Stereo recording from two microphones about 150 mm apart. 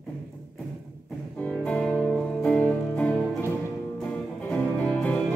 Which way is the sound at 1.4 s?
5° left (ahead or behind).